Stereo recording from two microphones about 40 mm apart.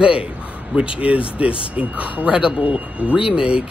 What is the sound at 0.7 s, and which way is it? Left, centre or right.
Speech, right.